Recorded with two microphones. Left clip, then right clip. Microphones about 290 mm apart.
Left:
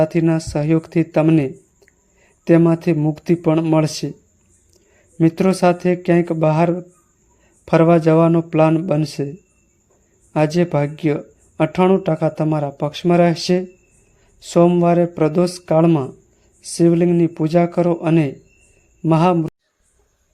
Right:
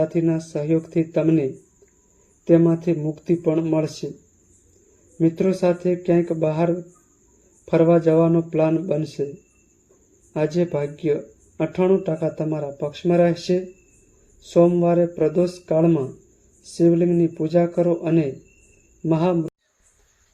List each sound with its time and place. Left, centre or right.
0.0 s speech: left
5.1 s speech: left
10.3 s speech: left